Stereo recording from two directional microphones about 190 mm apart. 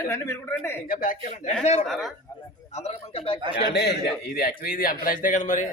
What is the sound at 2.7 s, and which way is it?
Speech, 35° left (ahead or behind).